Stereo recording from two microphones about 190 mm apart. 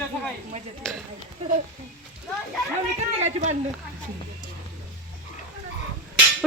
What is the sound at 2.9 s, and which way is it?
Speech, 35° right (ahead or behind).